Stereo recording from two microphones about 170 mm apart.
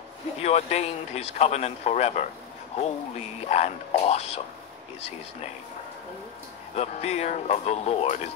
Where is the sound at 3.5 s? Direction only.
40° left (ahead or behind).